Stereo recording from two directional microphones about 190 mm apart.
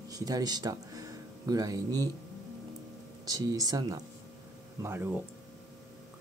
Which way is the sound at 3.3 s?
20° right (ahead or behind).